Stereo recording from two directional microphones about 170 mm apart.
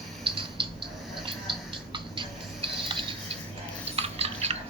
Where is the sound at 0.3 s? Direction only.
30° right (ahead or behind).